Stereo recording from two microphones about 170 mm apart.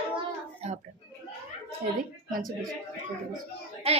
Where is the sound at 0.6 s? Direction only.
40° right (ahead or behind).